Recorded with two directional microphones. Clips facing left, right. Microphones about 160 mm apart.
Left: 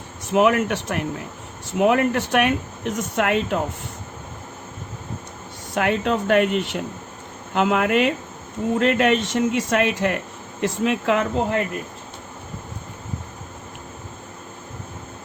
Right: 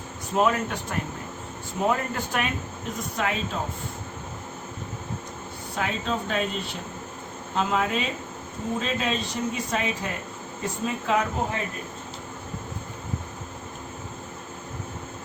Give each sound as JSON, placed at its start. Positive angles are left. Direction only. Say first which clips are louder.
{"t": 0.3, "sound": "speech", "louder": "left 6 dB", "side_deg": 80}
{"t": 5.7, "sound": "speech", "louder": "left 7 dB", "side_deg": 70}